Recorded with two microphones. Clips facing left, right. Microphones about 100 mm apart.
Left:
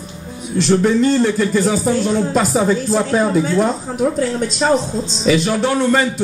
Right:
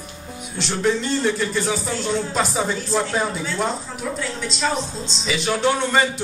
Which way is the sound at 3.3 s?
45° left (ahead or behind).